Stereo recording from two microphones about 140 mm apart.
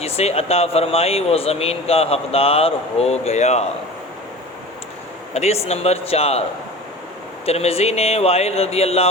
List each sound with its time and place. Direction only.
0.0 s speech: 50° left (ahead or behind)
5.3 s speech: 50° left (ahead or behind)
7.4 s speech: 45° left (ahead or behind)